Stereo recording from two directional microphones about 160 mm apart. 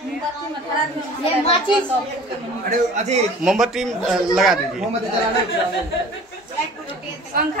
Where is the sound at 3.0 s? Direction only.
45° right (ahead or behind).